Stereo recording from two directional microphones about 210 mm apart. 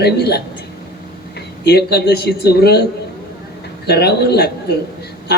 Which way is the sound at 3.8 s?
50° left (ahead or behind).